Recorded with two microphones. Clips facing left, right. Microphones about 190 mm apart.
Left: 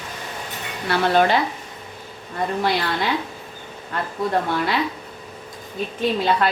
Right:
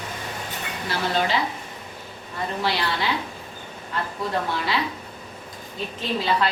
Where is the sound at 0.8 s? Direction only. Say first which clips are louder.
Left 7 dB; 55° left (ahead or behind).